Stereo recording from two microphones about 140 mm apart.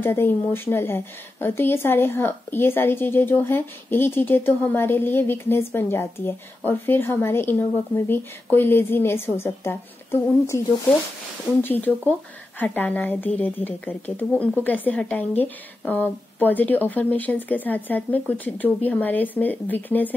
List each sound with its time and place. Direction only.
0.0 s a woman's voice: 15° left (ahead or behind)
11.6 s a woman's voice: 15° left (ahead or behind)